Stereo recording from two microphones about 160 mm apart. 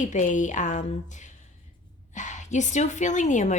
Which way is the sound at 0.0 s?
50° left (ahead or behind).